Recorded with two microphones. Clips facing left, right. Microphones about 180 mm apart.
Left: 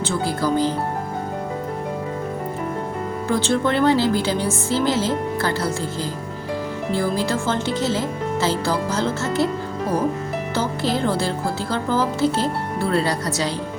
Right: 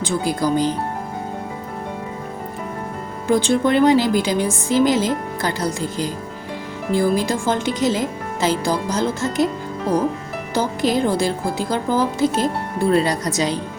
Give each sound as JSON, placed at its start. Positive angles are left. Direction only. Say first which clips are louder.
{"t": 0.0, "sound": "speech", "louder": "right 2 dB", "side_deg": -15}
{"t": 3.2, "sound": "speech", "louder": "right 4 dB", "side_deg": -15}
{"t": 10.5, "sound": "speech", "louder": "right 4 dB", "side_deg": -15}